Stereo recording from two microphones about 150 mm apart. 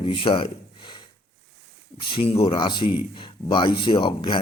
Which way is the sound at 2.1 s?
40° left (ahead or behind).